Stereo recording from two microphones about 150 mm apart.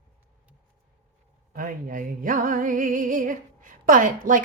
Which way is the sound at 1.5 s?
65° right (ahead or behind).